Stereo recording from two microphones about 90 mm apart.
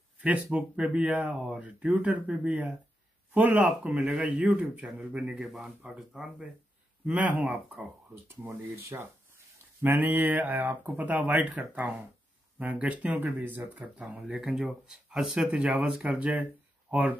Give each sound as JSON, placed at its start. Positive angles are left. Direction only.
{"t": 0.2, "sound": "speech", "side_deg": -15}
{"t": 3.6, "sound": "speech", "side_deg": -5}
{"t": 8.5, "sound": "speech", "side_deg": -30}